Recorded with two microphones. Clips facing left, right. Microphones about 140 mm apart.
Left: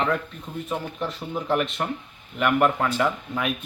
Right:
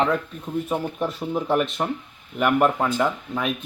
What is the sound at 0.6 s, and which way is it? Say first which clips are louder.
Speech: right 1 dB; 10° right (ahead or behind).